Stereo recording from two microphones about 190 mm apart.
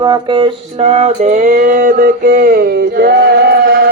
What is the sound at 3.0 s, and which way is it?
Chant, 55° right (ahead or behind).